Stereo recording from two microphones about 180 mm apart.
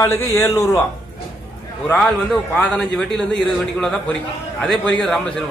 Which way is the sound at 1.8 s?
5° left (ahead or behind).